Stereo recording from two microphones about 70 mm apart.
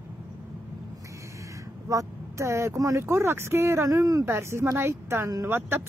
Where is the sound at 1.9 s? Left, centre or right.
Right.